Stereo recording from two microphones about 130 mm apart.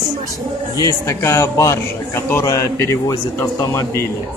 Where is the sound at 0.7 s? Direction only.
25° left (ahead or behind).